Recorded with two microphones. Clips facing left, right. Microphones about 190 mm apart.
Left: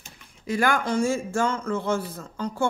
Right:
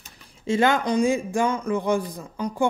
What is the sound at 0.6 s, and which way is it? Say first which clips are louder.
A woman's voice: right 3 dB; 20° right (ahead or behind).